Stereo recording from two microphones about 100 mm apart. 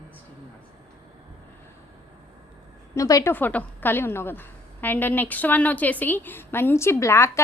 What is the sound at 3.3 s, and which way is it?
A woman's voice, 15° left (ahead or behind).